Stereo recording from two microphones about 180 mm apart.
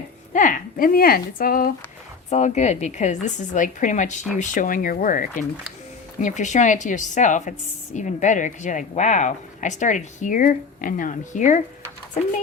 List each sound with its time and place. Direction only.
0.3 s a woman's voice: 45° left (ahead or behind)
2.3 s a woman's voice: 40° left (ahead or behind)